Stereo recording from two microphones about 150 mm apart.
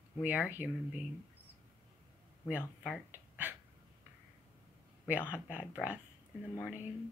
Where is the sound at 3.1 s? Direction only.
10° right (ahead or behind).